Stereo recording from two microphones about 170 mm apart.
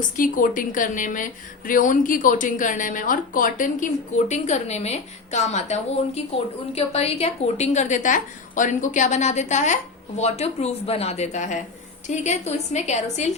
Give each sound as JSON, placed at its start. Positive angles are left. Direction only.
{"t": 0.2, "sound": "a woman's voice", "side_deg": 55}